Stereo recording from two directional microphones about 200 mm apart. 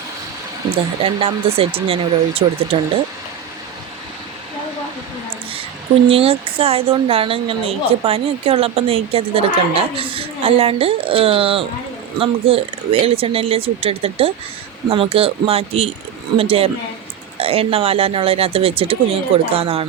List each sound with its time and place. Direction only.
1.0 s a woman's voice: 30° right (ahead or behind)
6.1 s a woman's voice: 30° right (ahead or behind)